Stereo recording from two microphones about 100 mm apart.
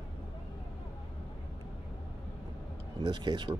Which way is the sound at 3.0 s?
45° right (ahead or behind).